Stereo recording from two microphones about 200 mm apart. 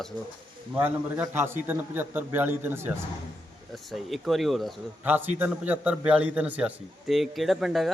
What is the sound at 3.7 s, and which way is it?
Speech, centre (ahead or behind).